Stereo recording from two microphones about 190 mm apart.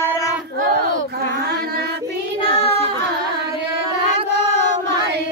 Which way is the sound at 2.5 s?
30° left (ahead or behind).